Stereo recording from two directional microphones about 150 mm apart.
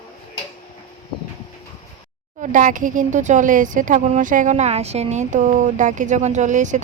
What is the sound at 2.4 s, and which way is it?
Speech, 60° right (ahead or behind).